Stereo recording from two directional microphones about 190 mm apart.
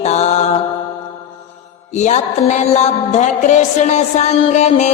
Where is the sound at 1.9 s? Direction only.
35° left (ahead or behind).